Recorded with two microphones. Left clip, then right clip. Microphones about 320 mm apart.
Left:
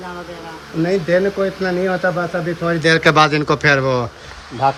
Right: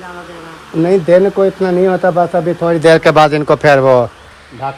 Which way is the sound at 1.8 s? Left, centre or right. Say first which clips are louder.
Right 8 dB; right.